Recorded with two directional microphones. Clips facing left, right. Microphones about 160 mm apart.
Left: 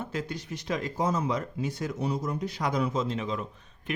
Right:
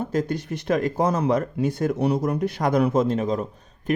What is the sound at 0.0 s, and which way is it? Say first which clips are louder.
Speech: right 9 dB; 45° right (ahead or behind).